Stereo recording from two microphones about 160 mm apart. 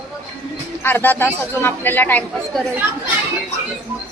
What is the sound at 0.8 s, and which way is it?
A man's voice, 15° left (ahead or behind).